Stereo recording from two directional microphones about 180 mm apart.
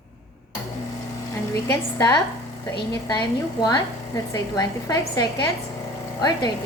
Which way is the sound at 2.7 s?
25° left (ahead or behind).